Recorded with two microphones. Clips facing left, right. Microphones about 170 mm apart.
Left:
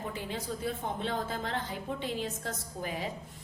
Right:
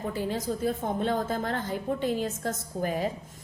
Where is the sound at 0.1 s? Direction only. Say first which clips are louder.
Right 7 dB; 40° right (ahead or behind).